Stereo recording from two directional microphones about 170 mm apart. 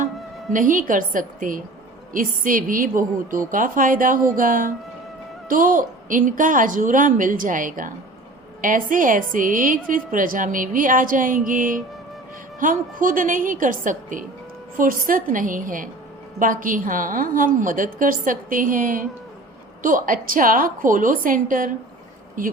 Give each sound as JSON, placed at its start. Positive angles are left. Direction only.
{"t": 0.5, "sound": "a woman's voice", "side_deg": -50}